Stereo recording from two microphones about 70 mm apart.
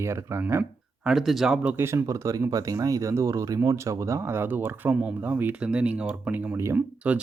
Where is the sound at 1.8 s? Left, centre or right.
Right.